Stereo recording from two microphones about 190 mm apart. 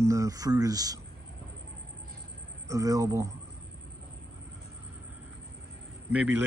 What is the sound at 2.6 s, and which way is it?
Speech, 15° right (ahead or behind).